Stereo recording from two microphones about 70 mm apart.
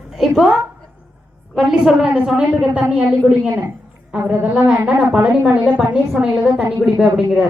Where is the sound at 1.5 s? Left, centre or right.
Centre.